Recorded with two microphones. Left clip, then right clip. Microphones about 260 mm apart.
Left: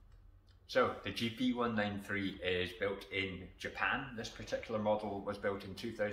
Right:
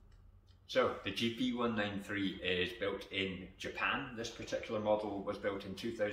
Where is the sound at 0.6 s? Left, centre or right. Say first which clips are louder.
Even; centre.